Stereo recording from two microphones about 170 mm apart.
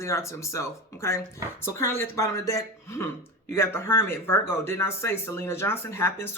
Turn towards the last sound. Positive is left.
turn(degrees=15)  # may be behind; listen again after turning